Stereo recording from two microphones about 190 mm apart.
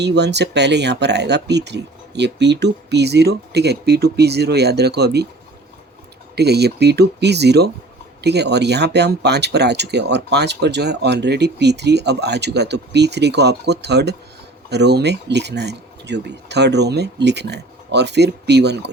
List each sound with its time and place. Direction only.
0.0 s speech: 65° right (ahead or behind)
6.3 s speech: 60° right (ahead or behind)